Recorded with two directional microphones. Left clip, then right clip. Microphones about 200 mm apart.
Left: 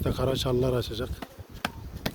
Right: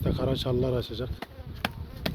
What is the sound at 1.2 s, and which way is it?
Insect, 30° right (ahead or behind).